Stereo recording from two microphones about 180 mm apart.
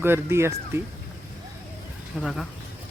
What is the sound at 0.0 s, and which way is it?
Speech, 15° right (ahead or behind).